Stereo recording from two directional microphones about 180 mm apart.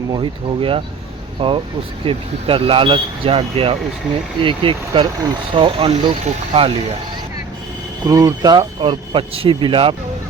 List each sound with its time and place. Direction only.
0.1 s speech: 25° right (ahead or behind)
8.0 s speech: 20° right (ahead or behind)